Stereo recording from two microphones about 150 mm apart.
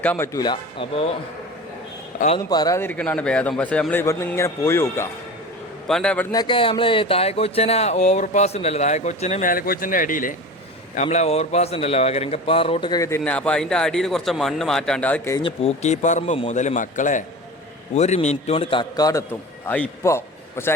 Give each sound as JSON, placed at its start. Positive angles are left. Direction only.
{"t": 0.0, "sound": "a man's voice", "side_deg": 10}
{"t": 0.3, "sound": "speech", "side_deg": 30}
{"t": 2.4, "sound": "a man's voice", "side_deg": 25}
{"t": 4.0, "sound": "a man's voice", "side_deg": 20}
{"t": 5.9, "sound": "speech", "side_deg": 5}
{"t": 6.3, "sound": "speech", "side_deg": 30}
{"t": 10.9, "sound": "speech", "side_deg": 50}
{"t": 13.1, "sound": "speech", "side_deg": 10}
{"t": 15.4, "sound": "speech", "side_deg": 45}
{"t": 19.6, "sound": "a man's voice", "side_deg": 10}